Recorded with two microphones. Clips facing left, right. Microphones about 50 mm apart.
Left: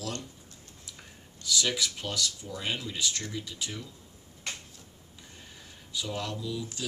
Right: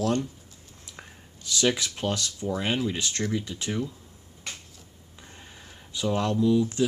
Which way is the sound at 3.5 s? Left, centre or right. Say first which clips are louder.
Right 3 dB; right.